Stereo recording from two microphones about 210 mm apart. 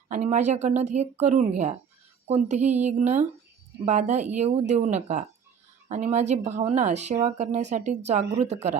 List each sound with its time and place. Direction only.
0.1 s speech: 35° right (ahead or behind)